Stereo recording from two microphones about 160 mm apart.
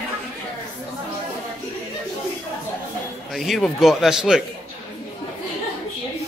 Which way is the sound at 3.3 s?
Centre (ahead or behind).